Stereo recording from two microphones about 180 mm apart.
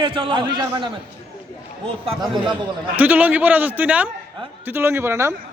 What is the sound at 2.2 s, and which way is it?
Speech, 25° right (ahead or behind).